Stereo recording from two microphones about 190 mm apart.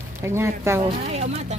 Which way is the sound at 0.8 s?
35° right (ahead or behind).